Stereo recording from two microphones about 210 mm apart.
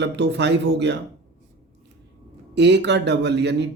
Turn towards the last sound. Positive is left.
turn(degrees=-55)  # may be behind; listen again after turning